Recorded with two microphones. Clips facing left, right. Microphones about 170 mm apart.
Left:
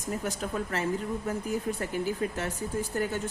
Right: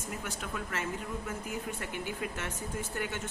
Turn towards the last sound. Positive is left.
turn(degrees=35)  # may be behind; listen again after turning